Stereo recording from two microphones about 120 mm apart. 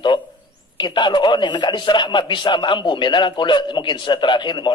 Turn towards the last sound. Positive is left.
turn(degrees=40)  # may be behind; listen again after turning